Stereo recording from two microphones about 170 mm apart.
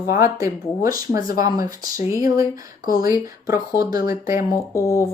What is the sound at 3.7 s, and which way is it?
Speech, 15° right (ahead or behind).